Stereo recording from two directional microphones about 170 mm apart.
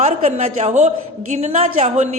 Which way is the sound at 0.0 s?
40° right (ahead or behind).